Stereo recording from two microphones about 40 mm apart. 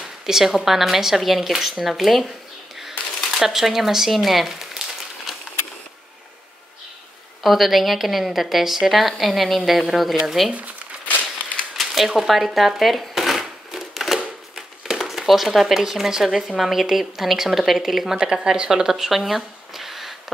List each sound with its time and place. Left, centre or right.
0.3 s a woman's voice: centre
3.3 s a woman's voice: centre
7.4 s a woman's voice: centre
11.1 s a sound: left
11.7 s speech: centre
13.9 s a sound: centre
15.0 s a woman's voice: centre
18.1 s speech: centre